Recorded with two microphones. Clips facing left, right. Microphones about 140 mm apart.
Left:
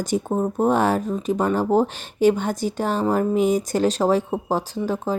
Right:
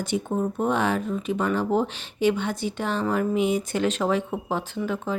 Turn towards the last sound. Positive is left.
turn(degrees=35)  # may be behind; listen again after turning